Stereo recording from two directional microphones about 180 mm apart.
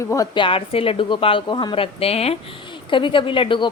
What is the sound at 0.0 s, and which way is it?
A woman's voice, 15° left (ahead or behind).